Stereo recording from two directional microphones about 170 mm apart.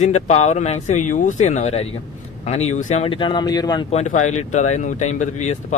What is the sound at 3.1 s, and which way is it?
Speech, 30° left (ahead or behind).